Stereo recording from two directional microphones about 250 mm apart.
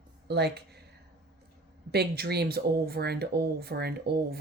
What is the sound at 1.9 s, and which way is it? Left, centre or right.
Speech, right.